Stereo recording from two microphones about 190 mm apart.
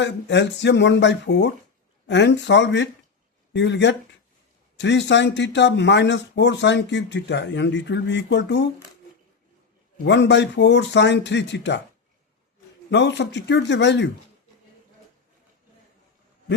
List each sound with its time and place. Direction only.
0.0 s speech: 70° left (ahead or behind)
10.0 s speech: 70° left (ahead or behind)
12.9 s speech: 65° left (ahead or behind)